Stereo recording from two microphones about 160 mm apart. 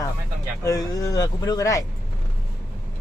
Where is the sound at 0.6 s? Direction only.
20° left (ahead or behind).